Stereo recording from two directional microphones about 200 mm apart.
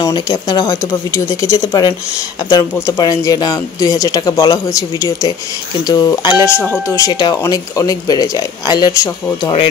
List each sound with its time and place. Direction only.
0.0 s speech: 20° left (ahead or behind)